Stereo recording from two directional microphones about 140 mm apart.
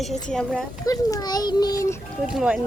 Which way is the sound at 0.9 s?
25° left (ahead or behind).